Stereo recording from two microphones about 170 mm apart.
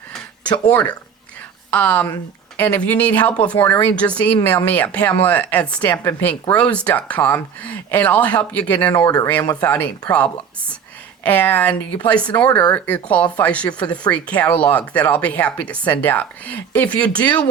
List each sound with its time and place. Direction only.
0.1 s a sound: 10° left (ahead or behind)
1.7 s speech: 10° left (ahead or behind)
6.0 s speech: 25° left (ahead or behind)
6.5 s speech: 5° left (ahead or behind)
9.0 s speech: 25° left (ahead or behind)
9.6 s speech: 5° left (ahead or behind)